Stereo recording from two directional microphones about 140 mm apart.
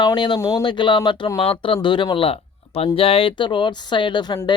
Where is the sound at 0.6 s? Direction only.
35° left (ahead or behind).